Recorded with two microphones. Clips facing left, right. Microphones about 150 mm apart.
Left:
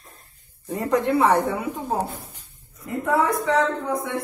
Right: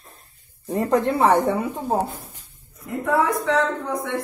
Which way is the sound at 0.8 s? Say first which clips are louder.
Right 1 dB; 30° right (ahead or behind).